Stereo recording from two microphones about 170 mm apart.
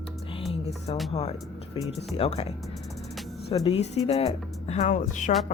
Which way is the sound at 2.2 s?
35° left (ahead or behind).